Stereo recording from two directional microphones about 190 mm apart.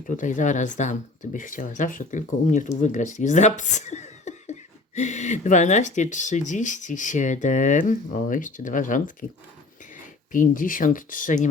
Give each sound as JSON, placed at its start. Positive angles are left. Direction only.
{"t": 0.1, "sound": "speech", "side_deg": 40}
{"t": 10.3, "sound": "speech", "side_deg": 45}